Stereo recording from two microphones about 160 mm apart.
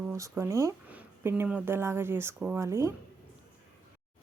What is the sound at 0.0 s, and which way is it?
Speech, 15° right (ahead or behind).